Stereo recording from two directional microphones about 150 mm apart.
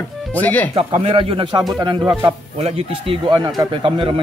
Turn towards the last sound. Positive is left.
turn(degrees=-35)  # may be behind; listen again after turning